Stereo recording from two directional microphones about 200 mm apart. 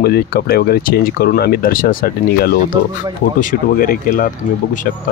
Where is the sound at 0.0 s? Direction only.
50° left (ahead or behind).